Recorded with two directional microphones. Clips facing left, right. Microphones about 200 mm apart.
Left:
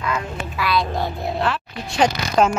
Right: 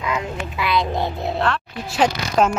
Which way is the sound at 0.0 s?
15° right (ahead or behind).